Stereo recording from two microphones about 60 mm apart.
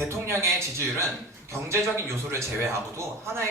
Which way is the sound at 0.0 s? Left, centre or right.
Right.